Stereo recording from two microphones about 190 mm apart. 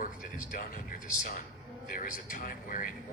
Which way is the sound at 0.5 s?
45° left (ahead or behind).